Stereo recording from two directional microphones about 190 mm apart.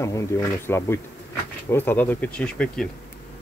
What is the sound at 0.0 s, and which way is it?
Speech, 15° left (ahead or behind).